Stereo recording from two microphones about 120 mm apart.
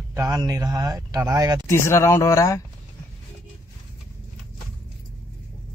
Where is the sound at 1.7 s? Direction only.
20° left (ahead or behind).